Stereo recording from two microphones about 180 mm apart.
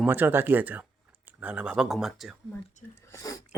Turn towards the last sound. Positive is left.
turn(degrees=20)  # may be behind; listen again after turning